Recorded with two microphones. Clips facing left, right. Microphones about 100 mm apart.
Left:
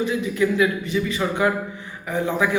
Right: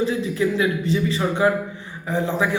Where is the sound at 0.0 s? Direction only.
30° right (ahead or behind).